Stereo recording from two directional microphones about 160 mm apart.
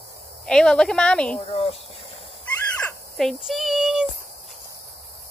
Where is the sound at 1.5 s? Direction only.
40° left (ahead or behind).